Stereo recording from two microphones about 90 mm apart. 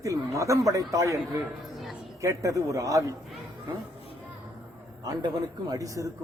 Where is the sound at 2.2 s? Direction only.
35° right (ahead or behind).